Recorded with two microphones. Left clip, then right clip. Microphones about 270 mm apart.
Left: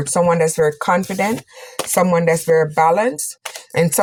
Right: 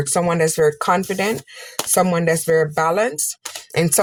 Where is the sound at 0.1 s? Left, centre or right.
Right.